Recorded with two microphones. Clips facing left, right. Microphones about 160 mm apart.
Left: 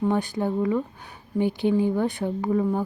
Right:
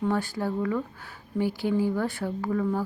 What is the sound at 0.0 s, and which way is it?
Speech, 20° left (ahead or behind).